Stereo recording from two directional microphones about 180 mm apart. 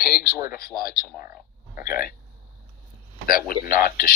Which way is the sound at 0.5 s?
55° left (ahead or behind).